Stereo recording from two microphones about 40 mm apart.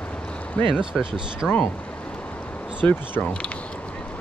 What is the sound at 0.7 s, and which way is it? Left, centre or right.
Speech, centre.